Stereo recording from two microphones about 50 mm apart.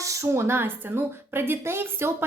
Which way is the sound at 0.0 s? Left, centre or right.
Right.